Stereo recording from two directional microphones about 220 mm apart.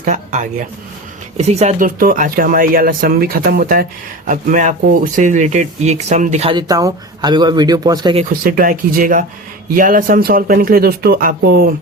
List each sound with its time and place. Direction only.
0.0 s speech: 35° right (ahead or behind); by 8.2 s 20° right (ahead or behind)
8.2 s speech: 40° right (ahead or behind)